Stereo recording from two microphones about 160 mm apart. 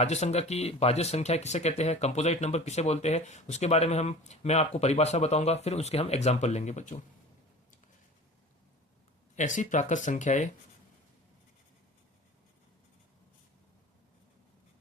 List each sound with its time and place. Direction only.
0.0 s speech: 45° left (ahead or behind)
9.3 s speech: 50° left (ahead or behind)